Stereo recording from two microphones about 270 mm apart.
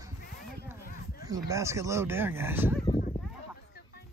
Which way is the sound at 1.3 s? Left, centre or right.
Centre.